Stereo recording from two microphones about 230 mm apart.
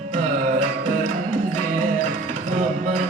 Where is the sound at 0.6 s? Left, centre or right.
Right.